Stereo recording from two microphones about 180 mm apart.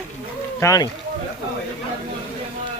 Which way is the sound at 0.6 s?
20° left (ahead or behind).